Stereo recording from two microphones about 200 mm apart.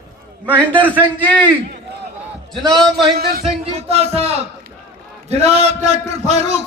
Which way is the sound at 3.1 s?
50° right (ahead or behind).